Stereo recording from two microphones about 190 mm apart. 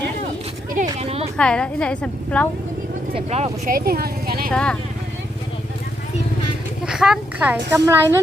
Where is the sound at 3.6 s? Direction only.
50° right (ahead or behind).